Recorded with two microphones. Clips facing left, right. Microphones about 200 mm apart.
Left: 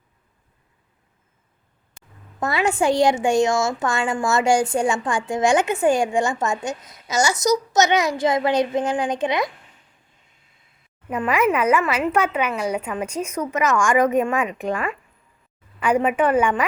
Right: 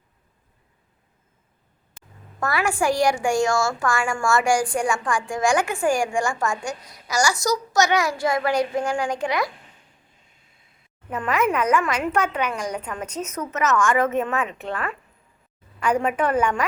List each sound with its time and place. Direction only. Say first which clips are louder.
2.4 s a woman's voice: left 2 dB; 20° left (ahead or behind)
11.1 s speech: left 3 dB; 10° left (ahead or behind)